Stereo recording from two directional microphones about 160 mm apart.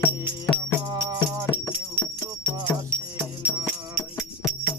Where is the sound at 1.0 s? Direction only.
20° right (ahead or behind).